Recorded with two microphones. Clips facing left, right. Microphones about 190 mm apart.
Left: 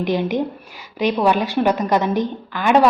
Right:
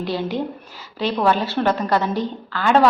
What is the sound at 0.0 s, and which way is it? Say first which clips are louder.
A woman's voice: left 4 dB; 15° left (ahead or behind).